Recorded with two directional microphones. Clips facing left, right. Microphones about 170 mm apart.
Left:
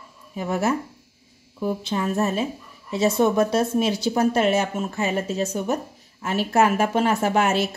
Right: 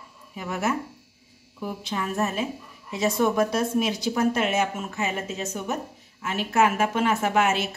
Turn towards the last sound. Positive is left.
turn(degrees=35)  # may be behind; listen again after turning